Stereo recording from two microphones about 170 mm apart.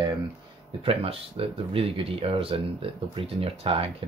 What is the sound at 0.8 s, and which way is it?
Speech, 35° right (ahead or behind).